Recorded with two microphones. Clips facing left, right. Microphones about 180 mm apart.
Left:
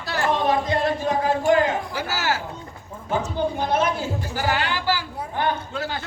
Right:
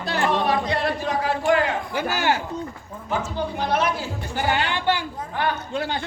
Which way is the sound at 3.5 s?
50° left (ahead or behind).